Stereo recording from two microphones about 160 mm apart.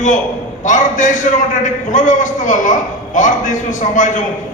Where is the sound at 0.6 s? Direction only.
50° left (ahead or behind).